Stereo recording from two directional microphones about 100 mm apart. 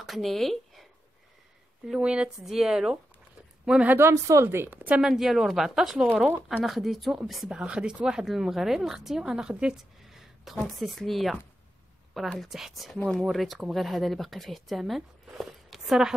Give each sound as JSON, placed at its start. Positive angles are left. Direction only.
{"t": 0.0, "sound": "a sound", "side_deg": 0}
{"t": 1.9, "sound": "speech", "side_deg": -10}
{"t": 4.1, "sound": "a woman's voice", "side_deg": -30}
{"t": 5.0, "sound": "a woman's voice", "side_deg": -5}
{"t": 12.4, "sound": "a woman's voice", "side_deg": -5}